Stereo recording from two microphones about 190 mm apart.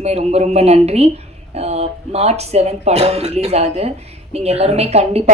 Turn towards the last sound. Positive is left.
turn(degrees=-35)  # may be behind; listen again after turning